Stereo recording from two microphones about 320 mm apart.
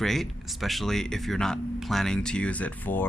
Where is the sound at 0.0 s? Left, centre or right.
Centre.